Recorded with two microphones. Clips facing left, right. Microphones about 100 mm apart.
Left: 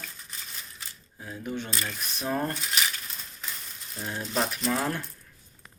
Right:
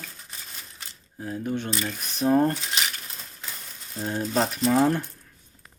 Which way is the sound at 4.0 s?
35° right (ahead or behind).